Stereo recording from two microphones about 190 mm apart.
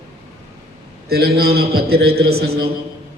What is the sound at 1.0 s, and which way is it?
A man's voice, 55° right (ahead or behind).